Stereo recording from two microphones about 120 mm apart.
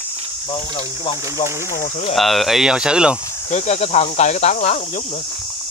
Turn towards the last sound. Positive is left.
turn(degrees=75)  # may be behind; listen again after turning